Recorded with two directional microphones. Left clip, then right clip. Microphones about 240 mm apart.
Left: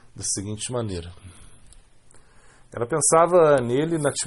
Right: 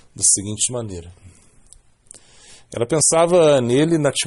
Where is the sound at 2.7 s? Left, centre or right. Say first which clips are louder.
Right 2 dB; right.